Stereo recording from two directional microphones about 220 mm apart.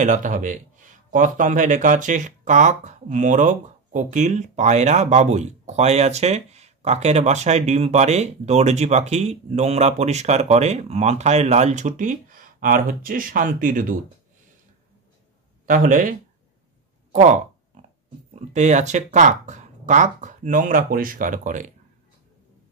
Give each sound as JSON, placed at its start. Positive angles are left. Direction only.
{"t": 0.0, "sound": "speech", "side_deg": -35}
{"t": 15.6, "sound": "speech", "side_deg": -35}